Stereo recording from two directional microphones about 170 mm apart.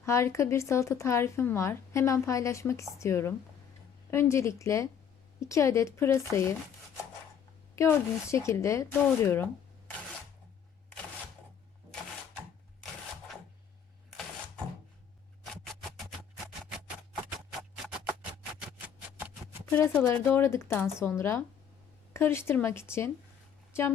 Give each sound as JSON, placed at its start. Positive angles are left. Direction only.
{"t": 0.0, "sound": "speech", "side_deg": 15}
{"t": 19.7, "sound": "speech", "side_deg": 10}